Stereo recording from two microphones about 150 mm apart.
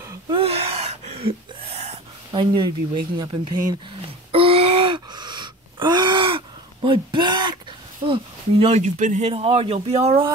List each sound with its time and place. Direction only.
0.3 s gasp: 40° right (ahead or behind)
2.3 s speech: 30° right (ahead or behind)
4.3 s gasp: 40° right (ahead or behind)
8.1 s speech: 40° right (ahead or behind)
9.3 s speech: 40° right (ahead or behind)